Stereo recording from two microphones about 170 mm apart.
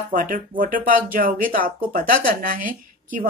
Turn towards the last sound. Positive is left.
turn(degrees=-55)  # may be behind; listen again after turning